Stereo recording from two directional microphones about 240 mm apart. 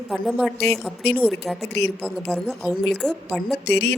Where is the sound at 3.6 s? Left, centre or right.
Left.